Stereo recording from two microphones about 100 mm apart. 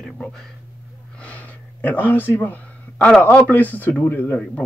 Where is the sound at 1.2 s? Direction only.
15° left (ahead or behind).